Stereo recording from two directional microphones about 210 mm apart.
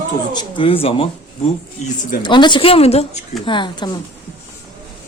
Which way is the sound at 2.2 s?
20° left (ahead or behind).